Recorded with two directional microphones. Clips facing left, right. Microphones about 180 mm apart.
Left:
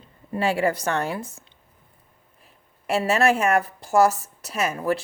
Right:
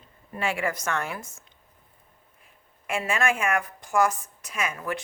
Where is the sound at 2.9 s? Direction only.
40° left (ahead or behind).